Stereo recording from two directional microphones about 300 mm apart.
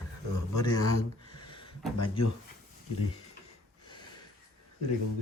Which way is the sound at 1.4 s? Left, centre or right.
Centre.